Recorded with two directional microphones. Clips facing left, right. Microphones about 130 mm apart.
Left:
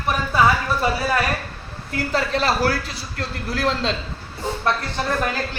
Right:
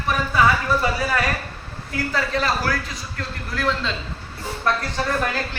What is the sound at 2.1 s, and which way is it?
A man's voice, 30° left (ahead or behind).